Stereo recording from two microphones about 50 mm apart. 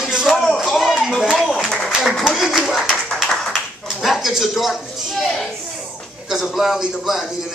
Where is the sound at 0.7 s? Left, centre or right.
Centre.